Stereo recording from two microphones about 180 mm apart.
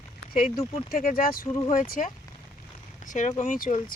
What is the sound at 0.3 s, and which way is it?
Speech, 50° left (ahead or behind).